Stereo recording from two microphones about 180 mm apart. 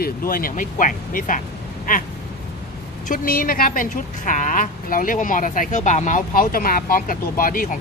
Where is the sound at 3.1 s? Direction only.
50° left (ahead or behind).